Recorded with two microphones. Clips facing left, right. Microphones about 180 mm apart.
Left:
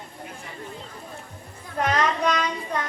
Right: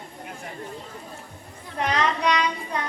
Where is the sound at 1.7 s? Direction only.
45° left (ahead or behind).